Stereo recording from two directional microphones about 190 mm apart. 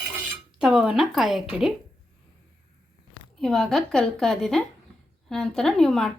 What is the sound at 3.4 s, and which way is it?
Speech, centre (ahead or behind).